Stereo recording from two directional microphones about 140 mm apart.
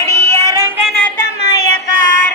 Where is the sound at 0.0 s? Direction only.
20° left (ahead or behind).